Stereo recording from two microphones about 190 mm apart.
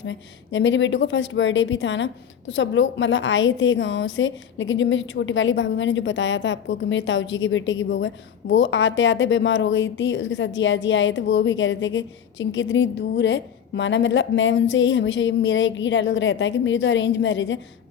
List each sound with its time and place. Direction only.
0.0 s a woman's voice: 75° left (ahead or behind)